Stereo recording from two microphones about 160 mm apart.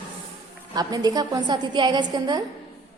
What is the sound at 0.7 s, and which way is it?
A woman's voice, 25° right (ahead or behind).